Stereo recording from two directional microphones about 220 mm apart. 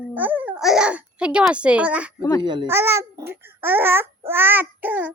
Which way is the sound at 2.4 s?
20° right (ahead or behind).